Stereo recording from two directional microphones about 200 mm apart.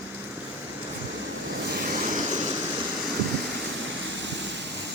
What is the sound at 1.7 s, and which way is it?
Vehicle, 45° right (ahead or behind).